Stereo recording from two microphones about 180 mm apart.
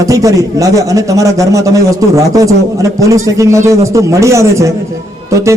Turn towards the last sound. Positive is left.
turn(degrees=-15)  # may be behind; listen again after turning